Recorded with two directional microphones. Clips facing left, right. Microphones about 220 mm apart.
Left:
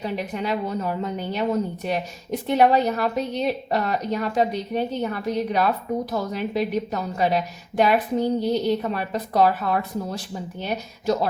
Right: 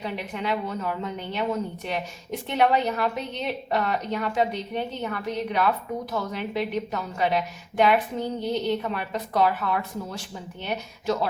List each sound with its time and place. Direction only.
0.0 s a woman's voice: 40° left (ahead or behind)